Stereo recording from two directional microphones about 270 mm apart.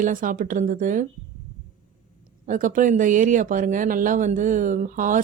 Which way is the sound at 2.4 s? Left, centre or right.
Right.